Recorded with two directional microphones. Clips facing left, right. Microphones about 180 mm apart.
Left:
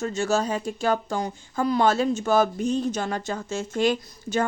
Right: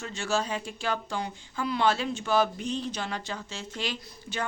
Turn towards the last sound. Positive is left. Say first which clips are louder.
# left 10 dB
turn(degrees=45)  # may be behind; listen again after turning